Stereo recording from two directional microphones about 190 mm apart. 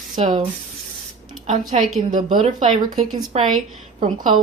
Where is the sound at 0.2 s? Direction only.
25° right (ahead or behind).